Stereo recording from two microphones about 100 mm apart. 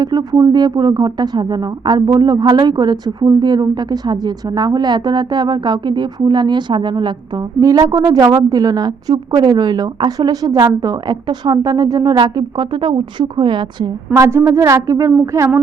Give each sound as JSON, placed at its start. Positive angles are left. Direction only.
{"t": 0.0, "sound": "speech", "side_deg": -45}
{"t": 7.6, "sound": "a woman's voice", "side_deg": -35}
{"t": 14.2, "sound": "a woman's voice", "side_deg": -30}